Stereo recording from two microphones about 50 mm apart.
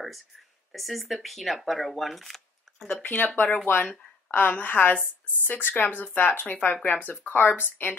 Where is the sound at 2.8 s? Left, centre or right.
Left.